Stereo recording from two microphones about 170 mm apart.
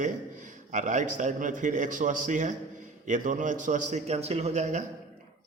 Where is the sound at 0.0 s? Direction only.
45° right (ahead or behind).